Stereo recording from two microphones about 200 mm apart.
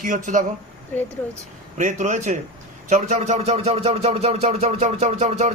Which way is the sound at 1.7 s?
35° right (ahead or behind).